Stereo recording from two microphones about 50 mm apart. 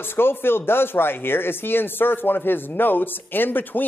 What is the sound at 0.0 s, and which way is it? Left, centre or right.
A man's voice, left.